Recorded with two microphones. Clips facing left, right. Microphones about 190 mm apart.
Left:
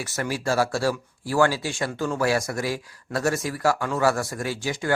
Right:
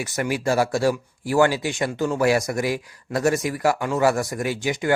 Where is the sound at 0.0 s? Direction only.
15° right (ahead or behind).